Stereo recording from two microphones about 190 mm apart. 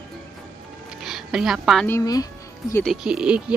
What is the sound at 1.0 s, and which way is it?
Speech, centre (ahead or behind).